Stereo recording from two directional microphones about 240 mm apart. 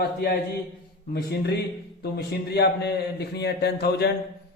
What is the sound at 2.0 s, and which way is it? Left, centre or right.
A man's voice, left.